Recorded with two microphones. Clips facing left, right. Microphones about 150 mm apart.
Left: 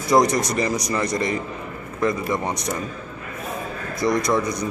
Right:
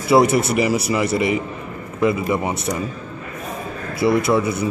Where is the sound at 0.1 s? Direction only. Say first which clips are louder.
Right 3 dB; 5° right (ahead or behind).